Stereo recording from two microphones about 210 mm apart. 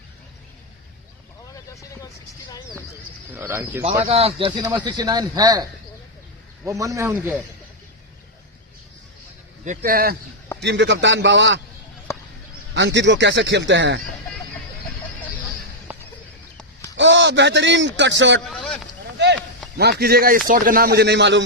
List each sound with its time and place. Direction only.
3.3 s speech: 10° right (ahead or behind)
4.0 s speech: 30° right (ahead or behind)
6.7 s speech: 15° right (ahead or behind)
9.6 s speech: 45° right (ahead or behind)
10.6 s speech: 55° right (ahead or behind)
12.7 s speech: 55° right (ahead or behind)
15.9 s a sound: 10° right (ahead or behind)
16.9 s a man's voice: 60° right (ahead or behind)
18.3 s a sound: 5° left (ahead or behind)
19.7 s speech: 50° right (ahead or behind)